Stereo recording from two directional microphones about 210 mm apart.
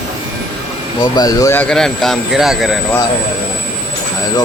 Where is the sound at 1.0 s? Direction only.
20° left (ahead or behind); by 2.8 s centre (ahead or behind).